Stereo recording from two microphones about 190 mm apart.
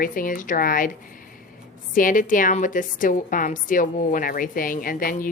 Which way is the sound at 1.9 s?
45° left (ahead or behind).